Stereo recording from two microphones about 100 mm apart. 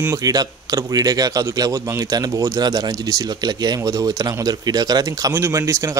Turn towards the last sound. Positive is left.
turn(degrees=-30)  # may be behind; listen again after turning